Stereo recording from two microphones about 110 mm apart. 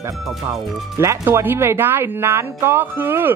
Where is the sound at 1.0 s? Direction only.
25° right (ahead or behind).